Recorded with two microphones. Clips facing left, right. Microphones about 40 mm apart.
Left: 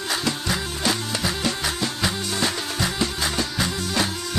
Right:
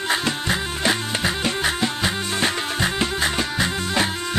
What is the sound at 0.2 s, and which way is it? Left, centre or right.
Music, right.